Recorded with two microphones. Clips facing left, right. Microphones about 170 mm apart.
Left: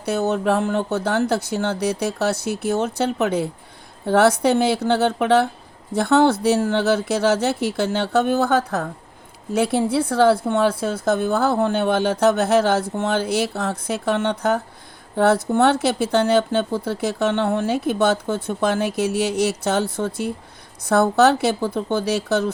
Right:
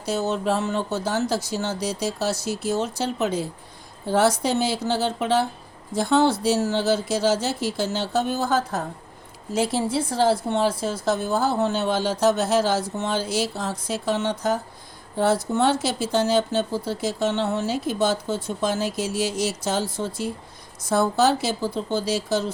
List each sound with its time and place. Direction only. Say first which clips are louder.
0.0 s speech: left 4 dB; 60° left (ahead or behind)